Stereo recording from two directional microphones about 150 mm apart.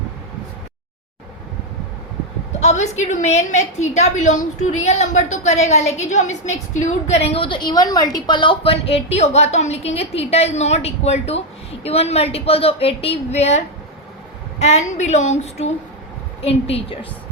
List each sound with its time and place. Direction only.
2.5 s a woman's voice: 50° left (ahead or behind)
14.6 s a woman's voice: 50° left (ahead or behind)